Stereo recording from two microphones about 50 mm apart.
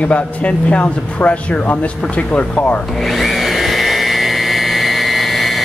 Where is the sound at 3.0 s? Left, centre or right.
Centre.